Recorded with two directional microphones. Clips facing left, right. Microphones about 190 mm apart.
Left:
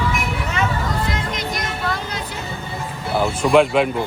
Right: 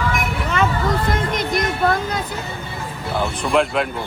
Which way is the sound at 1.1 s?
55° right (ahead or behind).